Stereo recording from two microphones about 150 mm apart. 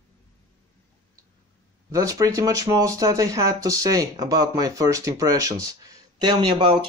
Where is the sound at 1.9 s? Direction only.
20° right (ahead or behind).